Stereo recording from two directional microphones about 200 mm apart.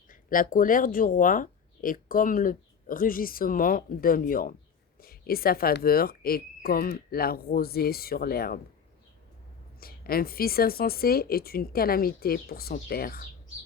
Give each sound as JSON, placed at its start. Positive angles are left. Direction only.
{"t": 0.1, "sound": "speech", "side_deg": 45}
{"t": 9.8, "sound": "speech", "side_deg": 50}